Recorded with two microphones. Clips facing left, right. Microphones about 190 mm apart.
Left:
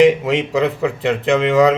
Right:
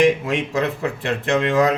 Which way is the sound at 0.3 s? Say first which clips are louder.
Left 5 dB; 20° left (ahead or behind).